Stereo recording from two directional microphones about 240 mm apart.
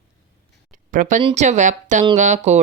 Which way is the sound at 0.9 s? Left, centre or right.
Right.